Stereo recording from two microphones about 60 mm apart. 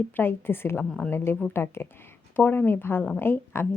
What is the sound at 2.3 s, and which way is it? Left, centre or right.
Speech, left.